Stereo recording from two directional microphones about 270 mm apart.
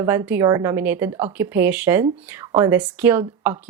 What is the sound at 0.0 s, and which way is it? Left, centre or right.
Speech, centre.